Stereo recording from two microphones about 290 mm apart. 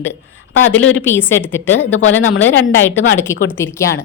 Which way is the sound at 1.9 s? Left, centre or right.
Left.